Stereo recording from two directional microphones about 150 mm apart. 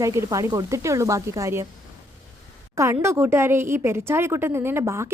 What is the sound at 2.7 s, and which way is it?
Speech, 20° right (ahead or behind).